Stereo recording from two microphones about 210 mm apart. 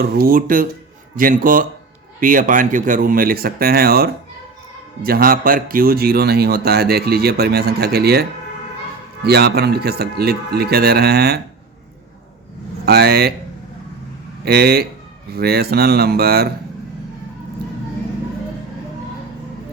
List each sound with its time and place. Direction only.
0.0 s a man's voice: 45° right (ahead or behind)
12.8 s a man's voice: 50° right (ahead or behind)
14.4 s a man's voice: 50° right (ahead or behind)